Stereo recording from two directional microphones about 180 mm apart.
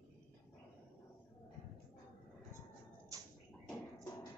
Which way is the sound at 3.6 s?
20° left (ahead or behind).